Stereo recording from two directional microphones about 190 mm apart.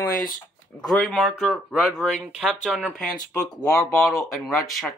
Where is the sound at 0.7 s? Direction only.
5° left (ahead or behind).